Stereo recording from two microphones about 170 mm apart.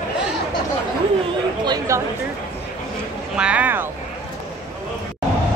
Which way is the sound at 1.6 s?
25° right (ahead or behind).